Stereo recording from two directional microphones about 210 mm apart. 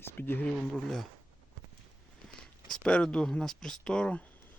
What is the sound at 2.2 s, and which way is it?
Speech, 5° left (ahead or behind).